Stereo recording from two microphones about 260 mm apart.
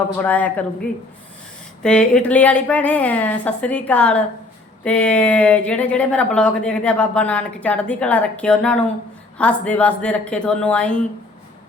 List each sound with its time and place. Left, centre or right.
0.2 s speech: centre